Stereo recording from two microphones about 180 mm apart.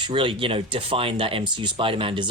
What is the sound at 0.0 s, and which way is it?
Speech, 30° right (ahead or behind).